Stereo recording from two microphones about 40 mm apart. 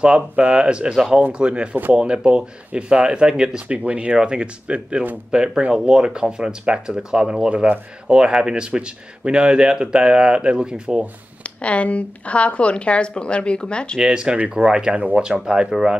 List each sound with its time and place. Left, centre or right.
0.0 s speech: right
3.6 s speech: right
11.4 s a woman's voice: left
13.9 s speech: right